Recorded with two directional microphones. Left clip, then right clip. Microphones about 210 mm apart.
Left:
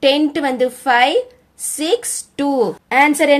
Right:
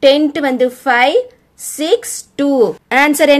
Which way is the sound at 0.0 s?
10° right (ahead or behind).